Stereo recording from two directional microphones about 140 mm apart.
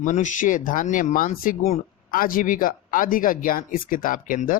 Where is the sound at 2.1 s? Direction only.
90° left.